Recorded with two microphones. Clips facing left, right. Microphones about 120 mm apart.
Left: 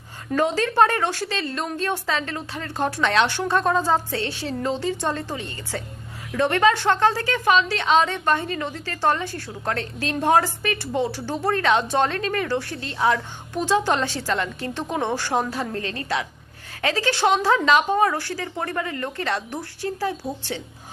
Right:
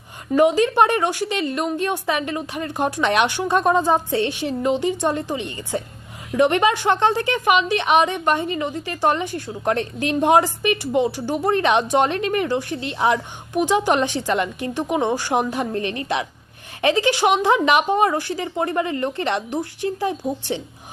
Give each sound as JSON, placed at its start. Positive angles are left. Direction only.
{"t": 0.3, "sound": "a woman's voice", "side_deg": -15}